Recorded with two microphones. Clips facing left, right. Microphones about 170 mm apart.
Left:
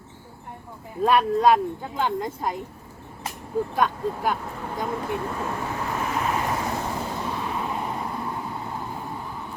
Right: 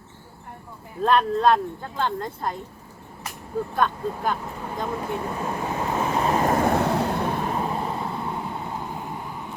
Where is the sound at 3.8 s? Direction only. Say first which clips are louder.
Right 2 dB; 10° left (ahead or behind).